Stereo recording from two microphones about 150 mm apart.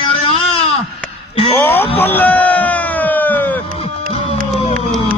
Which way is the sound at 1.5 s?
15° left (ahead or behind).